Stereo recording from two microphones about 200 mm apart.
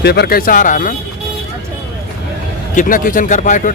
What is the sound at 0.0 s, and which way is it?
Speech, 55° left (ahead or behind).